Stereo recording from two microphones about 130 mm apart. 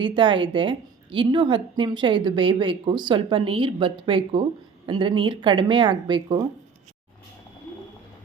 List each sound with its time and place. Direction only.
0.0 s a woman's voice: 40° right (ahead or behind)